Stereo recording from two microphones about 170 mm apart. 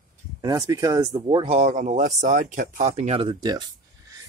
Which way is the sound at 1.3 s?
35° right (ahead or behind).